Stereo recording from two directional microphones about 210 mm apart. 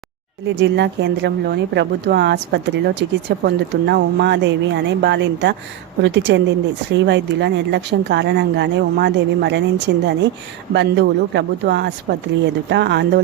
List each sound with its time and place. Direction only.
0.4 s speech: 55° right (ahead or behind)